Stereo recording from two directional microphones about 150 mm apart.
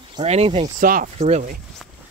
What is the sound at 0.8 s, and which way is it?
Speech, 65° right (ahead or behind).